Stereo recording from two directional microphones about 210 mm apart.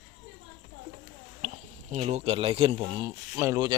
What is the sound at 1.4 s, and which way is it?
Speech, 35° right (ahead or behind).